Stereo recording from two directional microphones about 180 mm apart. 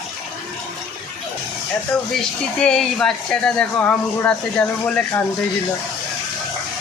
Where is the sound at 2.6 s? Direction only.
5° left (ahead or behind).